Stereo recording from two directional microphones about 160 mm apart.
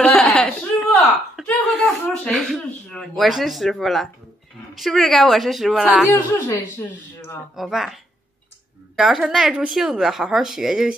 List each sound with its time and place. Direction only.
0.0 s a sound: 5° left (ahead or behind)
1.3 s speech: centre (ahead or behind)
6.0 s speech: 15° left (ahead or behind)
7.5 s speech: centre (ahead or behind)